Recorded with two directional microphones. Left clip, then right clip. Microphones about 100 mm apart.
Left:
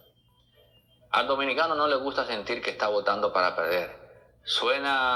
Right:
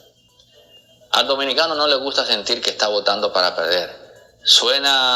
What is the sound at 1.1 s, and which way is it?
A man's voice, 30° right (ahead or behind).